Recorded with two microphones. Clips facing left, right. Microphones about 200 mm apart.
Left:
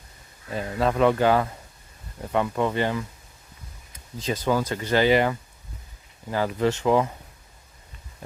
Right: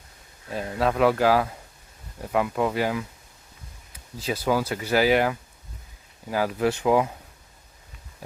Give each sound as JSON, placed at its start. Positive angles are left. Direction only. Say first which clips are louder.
{"t": 0.5, "sound": "speech", "louder": "even", "side_deg": 0}
{"t": 4.2, "sound": "speech", "louder": "even", "side_deg": -10}